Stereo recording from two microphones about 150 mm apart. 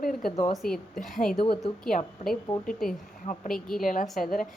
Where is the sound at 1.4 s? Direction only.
35° left (ahead or behind).